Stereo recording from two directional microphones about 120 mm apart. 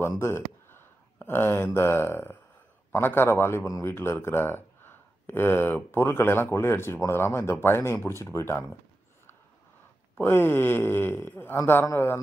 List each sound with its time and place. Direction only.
0.2 s a man's voice: 20° left (ahead or behind)
10.2 s a man's voice: 20° left (ahead or behind)